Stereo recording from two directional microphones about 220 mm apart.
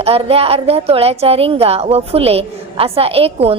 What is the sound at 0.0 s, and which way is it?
A woman's voice, 25° right (ahead or behind).